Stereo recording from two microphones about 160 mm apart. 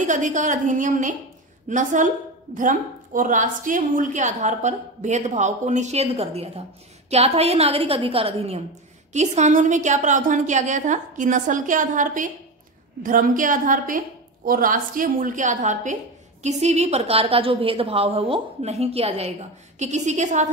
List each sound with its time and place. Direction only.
0.0 s a woman's voice: 50° right (ahead or behind)